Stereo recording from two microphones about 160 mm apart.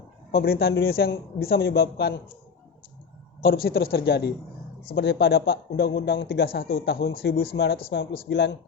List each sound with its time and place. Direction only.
0.3 s a man's voice: 75° left (ahead or behind)
3.4 s a man's voice: 70° left (ahead or behind)
4.9 s a man's voice: 75° left (ahead or behind)